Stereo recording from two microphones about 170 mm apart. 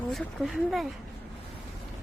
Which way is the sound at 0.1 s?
Centre (ahead or behind).